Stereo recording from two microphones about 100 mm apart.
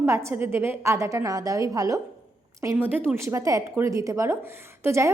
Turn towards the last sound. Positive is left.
turn(degrees=-30)  # may be behind; listen again after turning